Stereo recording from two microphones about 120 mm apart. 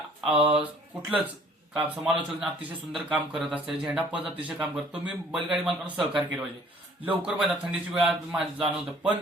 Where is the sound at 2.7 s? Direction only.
10° right (ahead or behind).